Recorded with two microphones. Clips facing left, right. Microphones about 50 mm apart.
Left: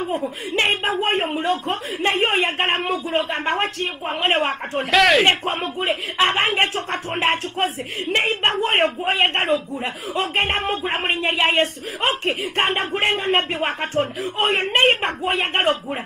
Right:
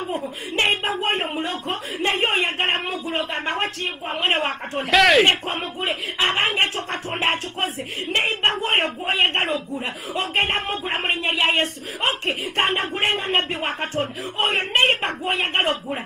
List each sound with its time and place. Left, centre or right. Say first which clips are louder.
0.0 s speech: left 3 dB; left
4.9 s speech: even; centre
5.2 s speech: left 1 dB; left
5.6 s speech: left 3 dB; left
6.1 s speech: left 2 dB; left